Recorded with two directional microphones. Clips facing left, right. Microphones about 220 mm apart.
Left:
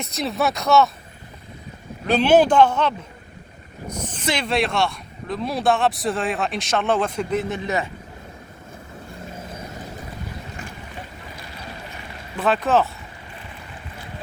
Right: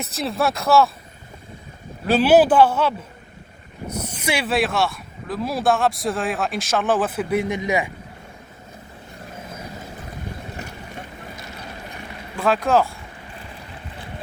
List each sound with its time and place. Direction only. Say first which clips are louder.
0.0 s speech: even; centre (ahead or behind)
2.0 s a man's voice: right 1 dB; 5° right (ahead or behind)
4.0 s speech: even; 10° right (ahead or behind)
12.4 s speech: right 1 dB; centre (ahead or behind)